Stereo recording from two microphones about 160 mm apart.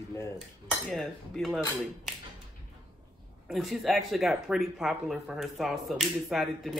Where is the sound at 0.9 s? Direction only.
Centre (ahead or behind).